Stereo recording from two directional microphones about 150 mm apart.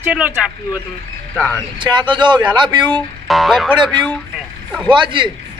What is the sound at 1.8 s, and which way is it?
Speech, 30° right (ahead or behind).